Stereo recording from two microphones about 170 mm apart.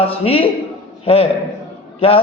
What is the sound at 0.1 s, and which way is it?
A man's voice, 35° left (ahead or behind).